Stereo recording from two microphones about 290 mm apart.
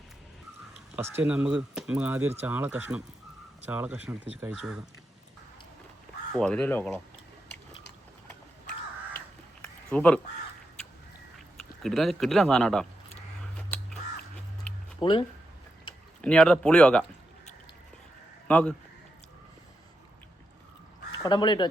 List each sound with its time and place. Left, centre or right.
0.9 s speech: centre
6.4 s speech: centre
9.1 s a sound: centre
11.8 s speech: centre
15.0 s speech: centre
16.2 s speech: centre
18.4 s a man's voice: centre
21.1 s speech: centre